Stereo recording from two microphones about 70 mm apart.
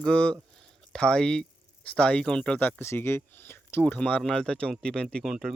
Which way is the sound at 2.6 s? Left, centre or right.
Left.